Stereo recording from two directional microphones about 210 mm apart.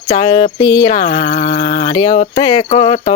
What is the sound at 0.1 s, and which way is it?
Speech, 20° left (ahead or behind).